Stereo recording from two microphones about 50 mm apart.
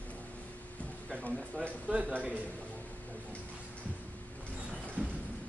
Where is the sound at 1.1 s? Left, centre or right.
Left.